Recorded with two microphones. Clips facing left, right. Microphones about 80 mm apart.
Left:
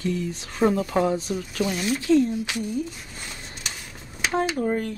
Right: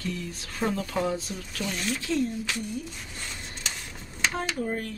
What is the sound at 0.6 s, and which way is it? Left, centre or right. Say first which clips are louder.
Speech: left 7 dB; centre.